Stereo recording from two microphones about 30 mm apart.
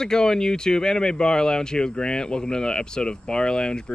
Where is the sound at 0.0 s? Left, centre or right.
Left.